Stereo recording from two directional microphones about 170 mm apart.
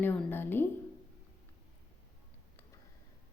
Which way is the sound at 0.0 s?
10° left (ahead or behind).